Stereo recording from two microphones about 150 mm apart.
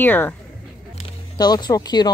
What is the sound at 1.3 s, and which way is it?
Speech, 25° left (ahead or behind).